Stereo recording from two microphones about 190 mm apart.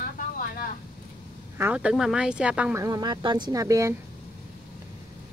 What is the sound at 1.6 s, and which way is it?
Speech, 5° right (ahead or behind).